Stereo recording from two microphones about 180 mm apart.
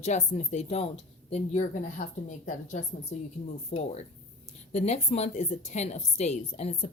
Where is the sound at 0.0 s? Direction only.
40° left (ahead or behind).